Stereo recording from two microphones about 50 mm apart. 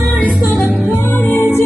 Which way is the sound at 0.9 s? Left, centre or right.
Left.